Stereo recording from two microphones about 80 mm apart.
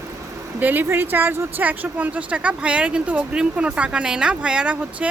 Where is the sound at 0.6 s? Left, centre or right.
Right.